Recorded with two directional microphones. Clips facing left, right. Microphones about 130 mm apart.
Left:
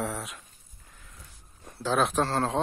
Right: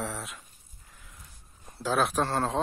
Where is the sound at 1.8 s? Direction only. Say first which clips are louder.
Left 1 dB; 5° right (ahead or behind).